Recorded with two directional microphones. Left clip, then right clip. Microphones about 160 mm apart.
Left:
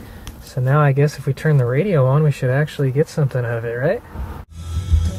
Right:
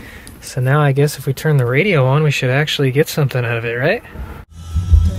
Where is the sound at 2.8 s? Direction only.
30° right (ahead or behind).